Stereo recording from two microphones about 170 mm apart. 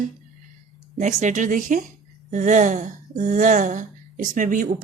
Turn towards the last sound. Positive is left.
turn(degrees=-50)  # may be behind; listen again after turning